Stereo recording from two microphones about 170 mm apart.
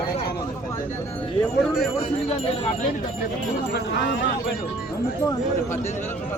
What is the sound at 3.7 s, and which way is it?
Speech, 80° left.